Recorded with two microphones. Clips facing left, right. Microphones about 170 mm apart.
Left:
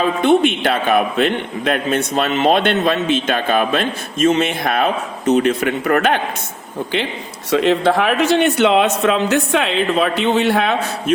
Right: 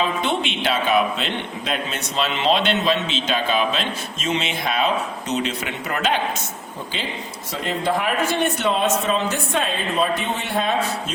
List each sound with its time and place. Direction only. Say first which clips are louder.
0.0 s a man's voice: left 9 dB; 50° left (ahead or behind)
7.5 s a man's voice: left 9 dB; 80° left